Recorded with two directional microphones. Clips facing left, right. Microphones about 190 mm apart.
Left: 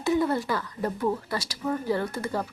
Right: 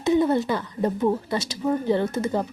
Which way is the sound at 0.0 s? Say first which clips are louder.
Right 4 dB; 20° right (ahead or behind).